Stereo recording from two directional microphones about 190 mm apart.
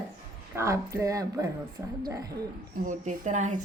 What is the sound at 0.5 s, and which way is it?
Speech, 15° right (ahead or behind).